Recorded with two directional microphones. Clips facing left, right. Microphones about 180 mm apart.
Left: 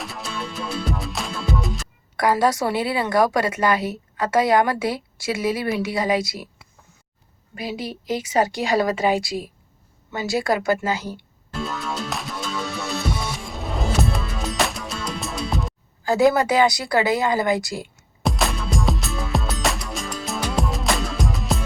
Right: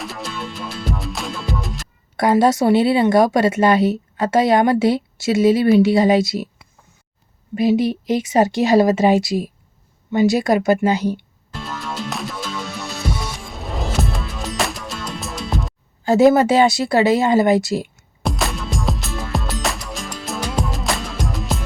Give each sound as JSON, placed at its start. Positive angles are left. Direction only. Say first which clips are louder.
{"t": 0.0, "sound": "music", "louder": "right 2 dB", "side_deg": 0}
{"t": 2.1, "sound": "speech", "louder": "right 4 dB", "side_deg": -25}
{"t": 7.5, "sound": "speech", "louder": "right 13 dB", "side_deg": -25}
{"t": 11.5, "sound": "music", "louder": "left 1 dB", "side_deg": 0}
{"t": 16.0, "sound": "speech", "louder": "right 5 dB", "side_deg": -25}
{"t": 18.2, "sound": "music", "louder": "even", "side_deg": 0}